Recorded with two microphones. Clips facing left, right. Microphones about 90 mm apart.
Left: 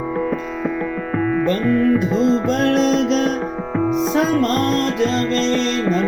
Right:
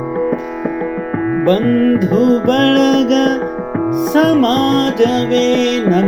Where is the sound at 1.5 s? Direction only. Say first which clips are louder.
Right 7 dB; 60° right (ahead or behind).